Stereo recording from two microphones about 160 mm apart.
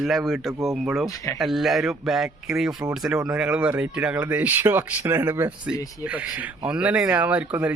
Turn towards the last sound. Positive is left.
turn(degrees=-10)  # may be behind; listen again after turning